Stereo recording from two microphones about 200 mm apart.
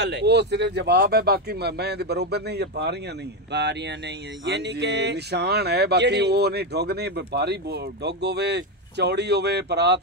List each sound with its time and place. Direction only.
0.0 s speech: 55° right (ahead or behind)